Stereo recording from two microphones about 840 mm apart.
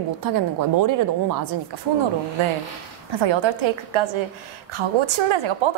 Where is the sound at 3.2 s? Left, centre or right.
Right.